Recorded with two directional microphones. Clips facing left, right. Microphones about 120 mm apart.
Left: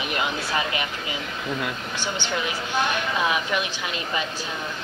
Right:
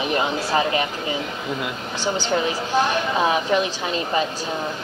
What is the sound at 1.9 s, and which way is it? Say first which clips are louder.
A woman's voice: right 9 dB; 35° right (ahead or behind).